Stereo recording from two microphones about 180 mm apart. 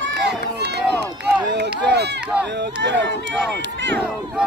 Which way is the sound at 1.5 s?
70° right (ahead or behind).